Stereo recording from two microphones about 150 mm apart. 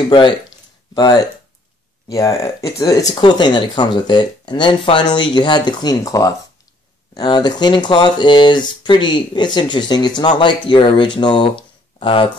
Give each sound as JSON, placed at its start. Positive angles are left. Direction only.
{"t": 0.9, "sound": "speech", "side_deg": 25}